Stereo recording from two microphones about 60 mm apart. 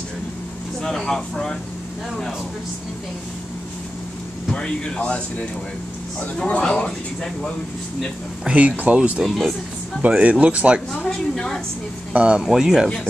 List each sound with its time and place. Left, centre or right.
0.8 s speech: centre
4.5 s speech: centre
6.3 s speech: centre
8.5 s speech: right
9.2 s speech: centre
10.0 s speech: right
11.0 s speech: centre
12.1 s speech: right
12.4 s speech: centre